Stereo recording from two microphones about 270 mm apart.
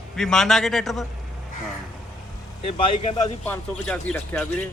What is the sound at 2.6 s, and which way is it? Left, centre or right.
A man's voice, left.